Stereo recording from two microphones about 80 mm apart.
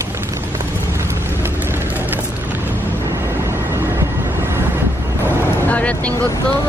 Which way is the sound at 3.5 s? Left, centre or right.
Right.